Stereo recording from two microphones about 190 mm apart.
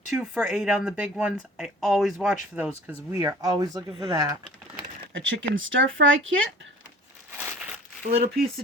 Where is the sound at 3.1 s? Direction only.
20° right (ahead or behind).